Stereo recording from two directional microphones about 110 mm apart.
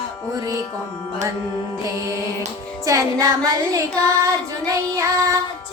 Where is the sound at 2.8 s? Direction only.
30° right (ahead or behind).